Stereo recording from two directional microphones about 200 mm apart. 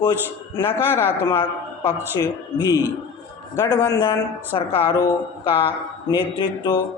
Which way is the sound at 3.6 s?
15° left (ahead or behind).